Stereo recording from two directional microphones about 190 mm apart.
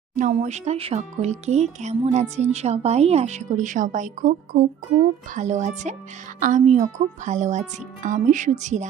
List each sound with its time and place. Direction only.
0.2 s speech: 40° right (ahead or behind)